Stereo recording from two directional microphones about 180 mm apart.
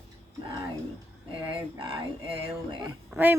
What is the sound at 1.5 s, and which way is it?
Speech, 30° right (ahead or behind).